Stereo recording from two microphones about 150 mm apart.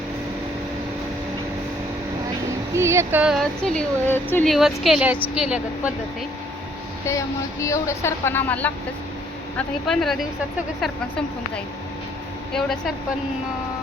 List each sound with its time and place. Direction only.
2.7 s speech: 20° right (ahead or behind); by 4.4 s 15° left (ahead or behind)
4.4 s speech: centre (ahead or behind)
7.1 s speech: 20° left (ahead or behind); by 10.2 s centre (ahead or behind)
12.5 s speech: 5° left (ahead or behind)